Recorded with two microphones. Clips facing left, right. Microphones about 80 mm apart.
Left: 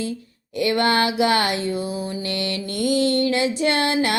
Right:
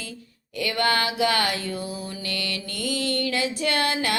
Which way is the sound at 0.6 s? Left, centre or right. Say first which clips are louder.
Left 5 dB; left.